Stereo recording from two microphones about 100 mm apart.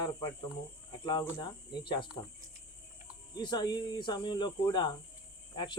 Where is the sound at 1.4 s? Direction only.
50° left (ahead or behind).